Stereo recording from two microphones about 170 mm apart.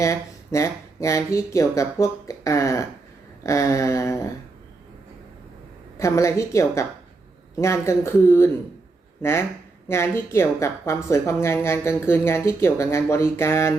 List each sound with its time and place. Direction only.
0.0 s a woman's voice: 20° left (ahead or behind)
6.0 s a woman's voice: 15° left (ahead or behind)